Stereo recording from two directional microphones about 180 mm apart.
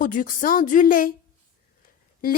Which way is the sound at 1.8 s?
50° left (ahead or behind).